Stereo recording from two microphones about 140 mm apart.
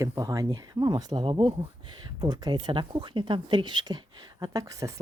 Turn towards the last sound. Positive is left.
turn(degrees=-25)  # may be behind; listen again after turning